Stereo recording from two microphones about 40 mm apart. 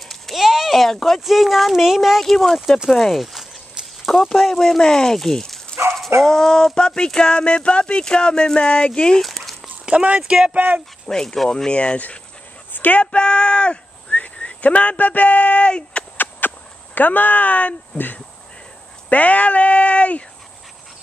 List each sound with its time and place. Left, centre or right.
0.4 s a sound: centre
1.2 s speech: centre; by 9.2 s left
9.2 s dog: centre
9.8 s speech: right
10.2 s speech: centre
11.1 s speech: centre
12.7 s a sound: left
13.0 s speech: left
14.1 s speech: left
15.7 s a sound: left
16.2 s a sound: left
17.9 s speech: left
19.0 s speech: left